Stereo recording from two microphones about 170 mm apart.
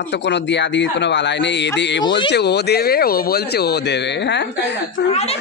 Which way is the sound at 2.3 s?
75° left (ahead or behind).